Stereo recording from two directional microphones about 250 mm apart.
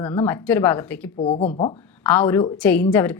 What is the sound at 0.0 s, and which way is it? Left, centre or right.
A woman's voice, centre.